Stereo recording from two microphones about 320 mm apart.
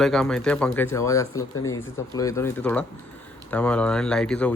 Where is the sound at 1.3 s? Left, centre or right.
Left.